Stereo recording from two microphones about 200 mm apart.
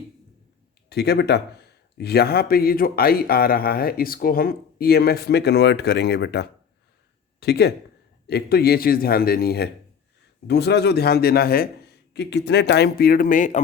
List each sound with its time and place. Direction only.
0.9 s speech: 55° left (ahead or behind)